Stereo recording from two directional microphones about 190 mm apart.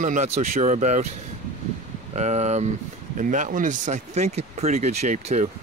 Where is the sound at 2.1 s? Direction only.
35° right (ahead or behind).